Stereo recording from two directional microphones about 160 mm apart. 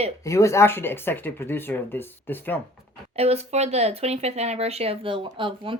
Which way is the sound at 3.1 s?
40° right (ahead or behind).